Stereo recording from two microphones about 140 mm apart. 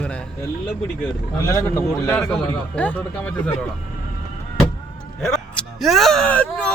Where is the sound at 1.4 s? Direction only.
20° left (ahead or behind).